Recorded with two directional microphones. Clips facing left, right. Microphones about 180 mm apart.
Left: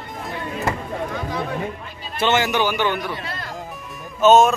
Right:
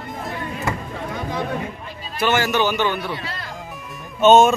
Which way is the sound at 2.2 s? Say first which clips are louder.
Even; 20° left (ahead or behind).